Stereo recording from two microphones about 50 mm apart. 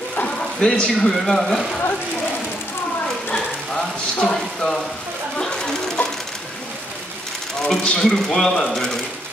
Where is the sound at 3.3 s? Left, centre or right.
Left.